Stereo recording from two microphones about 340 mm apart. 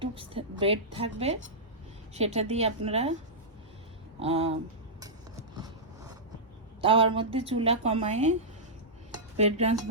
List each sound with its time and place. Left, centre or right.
0.0 s a woman's voice: centre
4.2 s a woman's voice: centre
4.9 s vehicle: centre
6.8 s a woman's voice: centre
9.1 s dishes: centre